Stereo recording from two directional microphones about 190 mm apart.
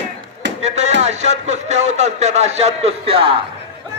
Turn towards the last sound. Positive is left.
turn(degrees=-30)  # may be behind; listen again after turning